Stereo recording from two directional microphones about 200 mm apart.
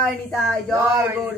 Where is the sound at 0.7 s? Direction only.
10° right (ahead or behind).